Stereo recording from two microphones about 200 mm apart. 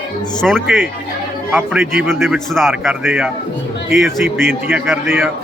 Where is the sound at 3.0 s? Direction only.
10° right (ahead or behind).